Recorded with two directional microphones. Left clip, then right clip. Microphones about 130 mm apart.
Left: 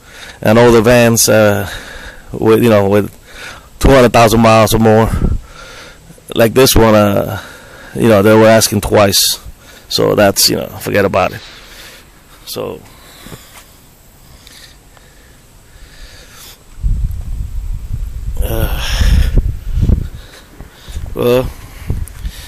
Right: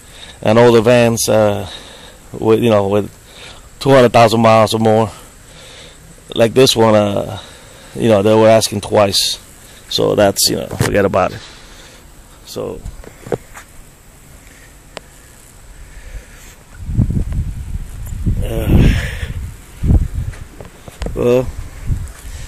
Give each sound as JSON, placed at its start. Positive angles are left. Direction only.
{"t": 0.1, "sound": "speech", "side_deg": 35}
{"t": 10.1, "sound": "speech", "side_deg": 20}
{"t": 10.6, "sound": "speech", "side_deg": 5}
{"t": 12.4, "sound": "speech", "side_deg": 10}
{"t": 18.4, "sound": "a sound", "side_deg": 25}
{"t": 21.1, "sound": "speech", "side_deg": 10}